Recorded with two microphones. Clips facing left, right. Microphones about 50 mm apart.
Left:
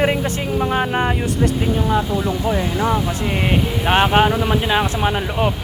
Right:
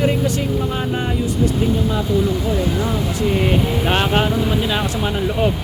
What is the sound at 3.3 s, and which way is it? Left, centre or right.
Speech, centre.